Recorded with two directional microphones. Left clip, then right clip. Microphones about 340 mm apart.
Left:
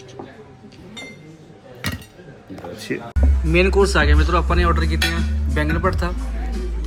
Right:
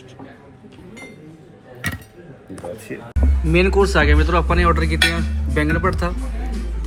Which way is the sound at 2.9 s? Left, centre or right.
Centre.